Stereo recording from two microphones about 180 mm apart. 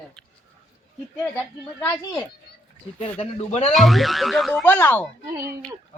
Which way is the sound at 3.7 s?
Centre (ahead or behind).